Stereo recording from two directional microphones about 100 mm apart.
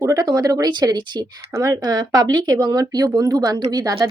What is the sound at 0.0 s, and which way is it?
Speech, 35° right (ahead or behind).